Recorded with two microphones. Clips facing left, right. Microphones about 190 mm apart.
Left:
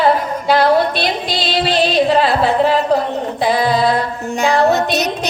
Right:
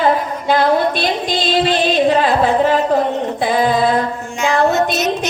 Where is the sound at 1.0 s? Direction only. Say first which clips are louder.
Right 1 dB; 45° right (ahead or behind).